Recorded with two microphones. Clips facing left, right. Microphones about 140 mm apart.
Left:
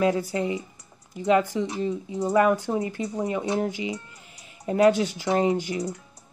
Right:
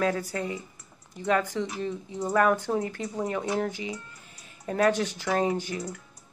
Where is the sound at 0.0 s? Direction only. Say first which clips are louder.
Left 4 dB; 15° left (ahead or behind).